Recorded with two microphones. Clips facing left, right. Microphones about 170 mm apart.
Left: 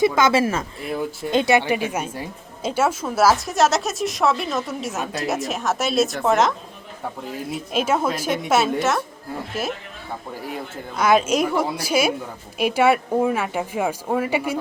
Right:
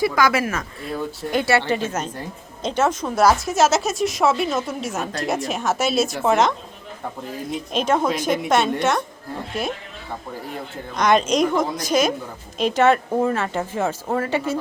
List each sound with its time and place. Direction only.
0.0 s speech: 25° left (ahead or behind); by 6.5 s centre (ahead or behind)
7.5 s speech: 5° left (ahead or behind)